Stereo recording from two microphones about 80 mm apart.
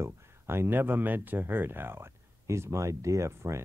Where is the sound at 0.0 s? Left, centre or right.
Right.